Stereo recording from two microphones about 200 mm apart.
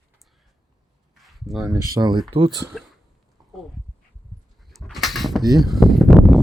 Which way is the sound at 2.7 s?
Centre (ahead or behind).